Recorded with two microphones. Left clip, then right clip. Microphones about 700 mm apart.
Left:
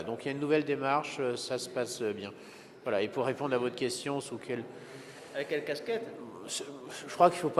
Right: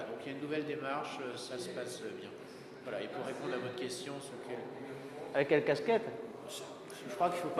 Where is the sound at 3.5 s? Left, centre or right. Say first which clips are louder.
Left 7 dB; left.